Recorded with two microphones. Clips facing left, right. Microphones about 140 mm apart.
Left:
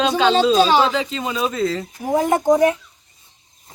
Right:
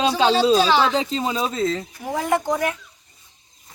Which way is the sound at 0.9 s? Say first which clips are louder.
Right 1 dB; 35° right (ahead or behind).